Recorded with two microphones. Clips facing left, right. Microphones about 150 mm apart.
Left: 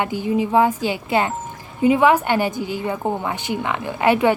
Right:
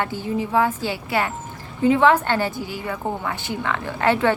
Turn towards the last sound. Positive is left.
turn(degrees=15)  # may be behind; listen again after turning